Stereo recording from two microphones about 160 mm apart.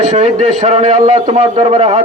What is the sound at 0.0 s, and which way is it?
A man's voice, 45° right (ahead or behind).